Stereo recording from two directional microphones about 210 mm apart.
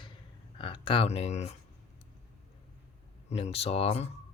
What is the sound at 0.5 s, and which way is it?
Speech, 25° left (ahead or behind).